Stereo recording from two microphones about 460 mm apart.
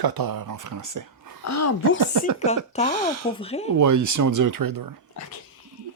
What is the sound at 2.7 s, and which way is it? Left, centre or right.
Speech, centre.